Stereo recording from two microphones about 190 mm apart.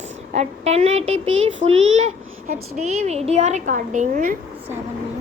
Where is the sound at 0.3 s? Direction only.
35° right (ahead or behind).